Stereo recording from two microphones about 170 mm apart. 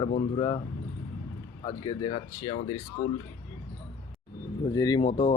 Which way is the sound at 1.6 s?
25° left (ahead or behind).